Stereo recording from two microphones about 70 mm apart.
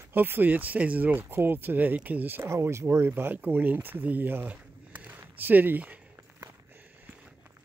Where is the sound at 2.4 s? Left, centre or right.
Right.